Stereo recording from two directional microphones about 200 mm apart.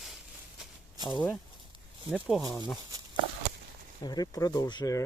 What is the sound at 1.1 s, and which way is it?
Speech, 5° left (ahead or behind).